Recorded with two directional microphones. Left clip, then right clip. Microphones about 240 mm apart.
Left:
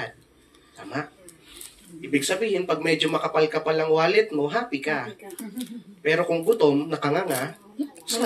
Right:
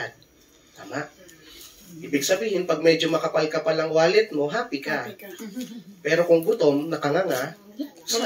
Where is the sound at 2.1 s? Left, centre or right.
Left.